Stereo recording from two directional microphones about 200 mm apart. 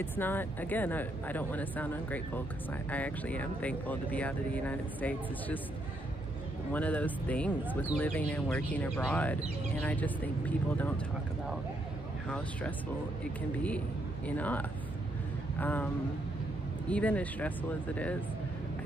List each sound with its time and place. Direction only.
0.0 s speech: 10° left (ahead or behind)
6.7 s speech: 5° left (ahead or behind)
13.2 s speech: 5° left (ahead or behind)
15.6 s speech: 10° left (ahead or behind)
16.9 s speech: 5° left (ahead or behind)